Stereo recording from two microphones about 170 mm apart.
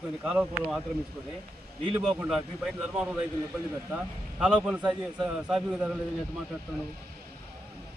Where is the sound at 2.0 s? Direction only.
5° right (ahead or behind).